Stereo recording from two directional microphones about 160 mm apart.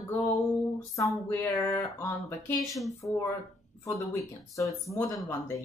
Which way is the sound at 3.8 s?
20° left (ahead or behind).